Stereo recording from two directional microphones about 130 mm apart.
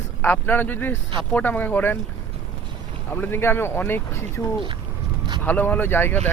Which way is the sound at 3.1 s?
15° left (ahead or behind).